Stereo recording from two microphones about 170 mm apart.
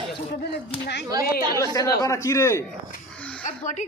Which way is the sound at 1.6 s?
20° left (ahead or behind).